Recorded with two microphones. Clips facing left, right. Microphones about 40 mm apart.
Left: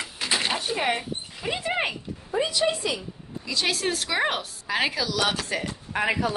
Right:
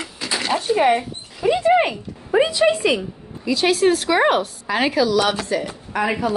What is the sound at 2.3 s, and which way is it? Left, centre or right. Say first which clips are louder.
Speech: right 9 dB; right.